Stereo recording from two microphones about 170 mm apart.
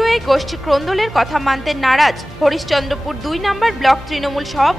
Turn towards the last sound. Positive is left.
turn(degrees=0)  # may be behind; listen again after turning